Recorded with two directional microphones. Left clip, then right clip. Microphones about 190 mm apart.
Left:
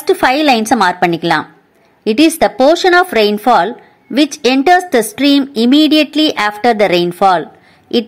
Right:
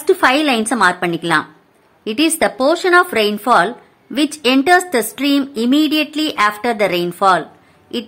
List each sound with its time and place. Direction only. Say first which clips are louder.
0.0 s a woman's voice: left 2 dB; 20° left (ahead or behind)